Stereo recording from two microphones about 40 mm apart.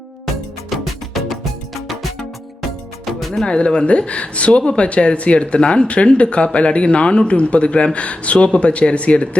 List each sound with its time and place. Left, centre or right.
0.7 s music: centre
3.4 s speech: left